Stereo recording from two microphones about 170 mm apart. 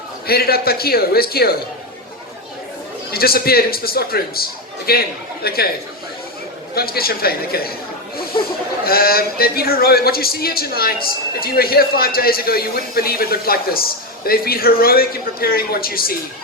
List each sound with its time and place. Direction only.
0.3 s a man's voice: 65° left (ahead or behind)
3.1 s a man's voice: 65° left (ahead or behind)
6.7 s a man's voice: 65° left (ahead or behind)
8.8 s a man's voice: 60° left (ahead or behind)